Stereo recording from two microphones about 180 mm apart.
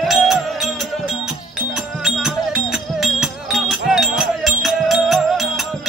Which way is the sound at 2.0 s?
5° right (ahead or behind).